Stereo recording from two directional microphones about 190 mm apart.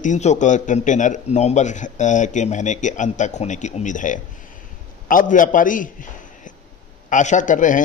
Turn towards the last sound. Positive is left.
turn(degrees=40)  # may be behind; listen again after turning